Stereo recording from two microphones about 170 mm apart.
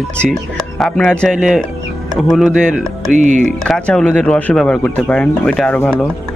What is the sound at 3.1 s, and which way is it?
Speech, 45° right (ahead or behind).